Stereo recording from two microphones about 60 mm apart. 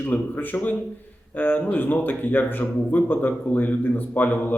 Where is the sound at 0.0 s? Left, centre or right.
Left.